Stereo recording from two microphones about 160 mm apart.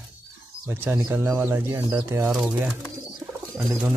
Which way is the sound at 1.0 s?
15° right (ahead or behind).